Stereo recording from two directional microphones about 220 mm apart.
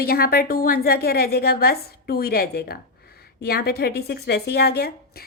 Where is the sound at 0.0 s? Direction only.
45° left (ahead or behind).